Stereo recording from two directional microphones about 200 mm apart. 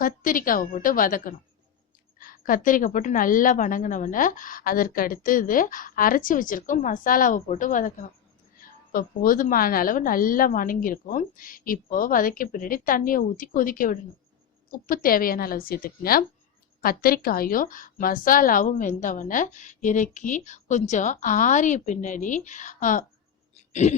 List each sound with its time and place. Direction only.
0.0 s a woman's voice: 45° left (ahead or behind)